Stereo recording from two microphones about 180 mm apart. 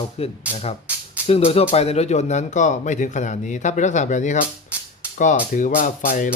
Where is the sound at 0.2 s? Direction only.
35° left (ahead or behind).